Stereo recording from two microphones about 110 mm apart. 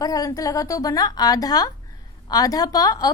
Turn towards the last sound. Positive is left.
turn(degrees=35)  # may be behind; listen again after turning